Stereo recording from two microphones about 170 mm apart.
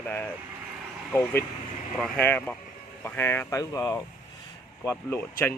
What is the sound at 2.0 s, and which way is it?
Speech, 10° left (ahead or behind).